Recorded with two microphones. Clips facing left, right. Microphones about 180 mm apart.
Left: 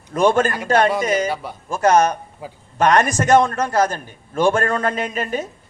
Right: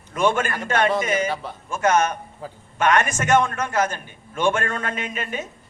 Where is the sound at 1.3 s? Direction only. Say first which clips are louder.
Left 2 dB; 10° left (ahead or behind).